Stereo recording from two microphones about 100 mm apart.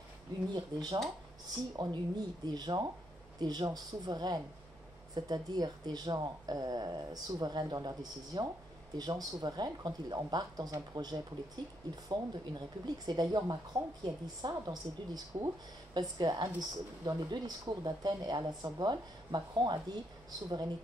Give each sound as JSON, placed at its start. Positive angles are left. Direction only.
{"t": 0.5, "sound": "speech", "side_deg": -45}